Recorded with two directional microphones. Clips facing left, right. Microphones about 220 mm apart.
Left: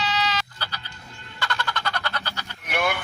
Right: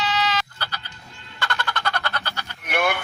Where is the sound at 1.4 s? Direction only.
55° right (ahead or behind).